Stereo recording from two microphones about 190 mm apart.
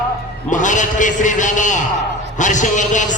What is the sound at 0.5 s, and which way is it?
A man's voice, 40° left (ahead or behind).